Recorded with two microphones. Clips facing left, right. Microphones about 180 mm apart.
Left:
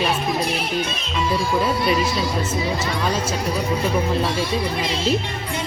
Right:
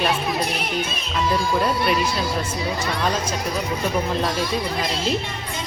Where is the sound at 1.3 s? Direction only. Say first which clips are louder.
Left 1 dB; centre (ahead or behind).